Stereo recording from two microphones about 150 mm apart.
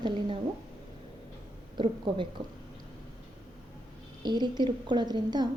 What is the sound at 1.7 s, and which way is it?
Speech, 35° right (ahead or behind).